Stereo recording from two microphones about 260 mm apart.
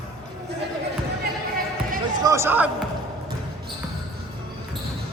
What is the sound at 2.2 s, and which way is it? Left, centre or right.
Basketball bounce, centre.